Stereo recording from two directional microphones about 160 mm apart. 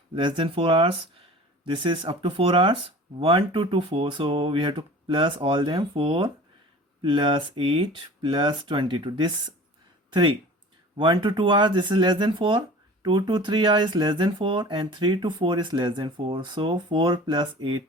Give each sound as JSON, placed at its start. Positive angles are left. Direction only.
{"t": 0.1, "sound": "speech", "side_deg": -30}